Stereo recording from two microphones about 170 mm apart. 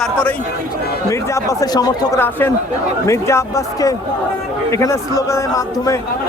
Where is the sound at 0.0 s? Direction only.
10° left (ahead or behind).